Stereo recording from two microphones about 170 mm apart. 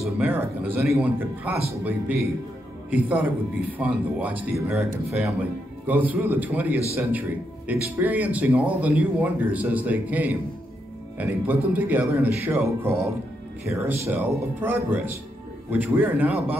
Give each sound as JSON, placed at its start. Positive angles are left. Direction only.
{"t": 0.2, "sound": "speech", "side_deg": -10}
{"t": 5.9, "sound": "speech", "side_deg": -10}